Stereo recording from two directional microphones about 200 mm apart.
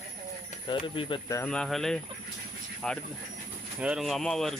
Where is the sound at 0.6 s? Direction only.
25° left (ahead or behind).